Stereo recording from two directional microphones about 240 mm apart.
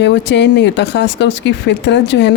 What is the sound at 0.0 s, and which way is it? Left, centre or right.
Speech, left.